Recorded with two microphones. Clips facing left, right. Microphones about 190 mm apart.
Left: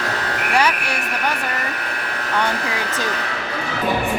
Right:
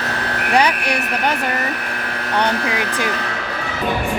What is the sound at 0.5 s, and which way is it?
Frog, 15° right (ahead or behind).